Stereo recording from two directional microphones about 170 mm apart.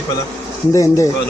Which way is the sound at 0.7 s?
15° left (ahead or behind).